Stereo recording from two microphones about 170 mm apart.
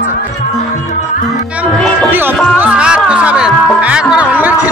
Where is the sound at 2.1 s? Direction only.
10° right (ahead or behind).